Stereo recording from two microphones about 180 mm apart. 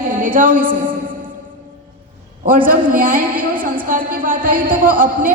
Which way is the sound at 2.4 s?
50° right (ahead or behind).